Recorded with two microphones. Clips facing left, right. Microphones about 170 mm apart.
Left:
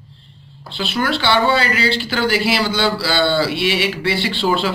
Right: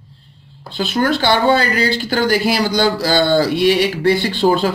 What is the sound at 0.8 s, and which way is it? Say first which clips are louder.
Speech: right 4 dB; 45° right (ahead or behind).